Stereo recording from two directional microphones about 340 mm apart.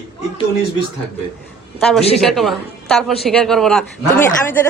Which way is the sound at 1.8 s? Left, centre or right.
Centre.